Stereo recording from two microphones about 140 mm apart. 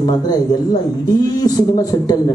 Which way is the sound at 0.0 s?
30° left (ahead or behind).